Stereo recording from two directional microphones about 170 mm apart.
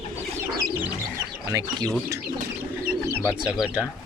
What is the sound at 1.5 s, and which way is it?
Speech, 20° right (ahead or behind).